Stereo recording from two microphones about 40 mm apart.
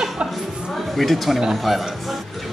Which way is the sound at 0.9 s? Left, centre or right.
Centre.